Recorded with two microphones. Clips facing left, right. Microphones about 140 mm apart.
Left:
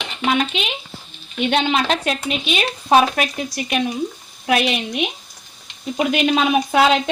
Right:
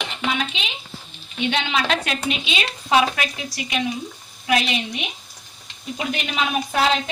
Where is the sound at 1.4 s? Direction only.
50° left (ahead or behind).